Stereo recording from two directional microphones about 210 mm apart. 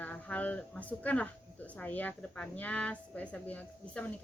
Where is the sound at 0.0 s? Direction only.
5° left (ahead or behind).